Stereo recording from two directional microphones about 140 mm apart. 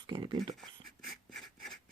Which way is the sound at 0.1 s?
35° right (ahead or behind).